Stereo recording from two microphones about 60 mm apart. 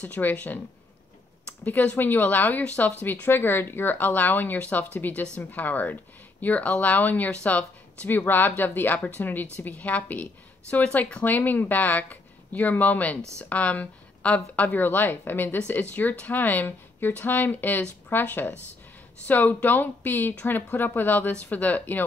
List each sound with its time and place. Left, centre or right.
0.0 s speech: left
3.3 s a woman's voice: left; by 11.2 s centre
11.2 s a woman's voice: left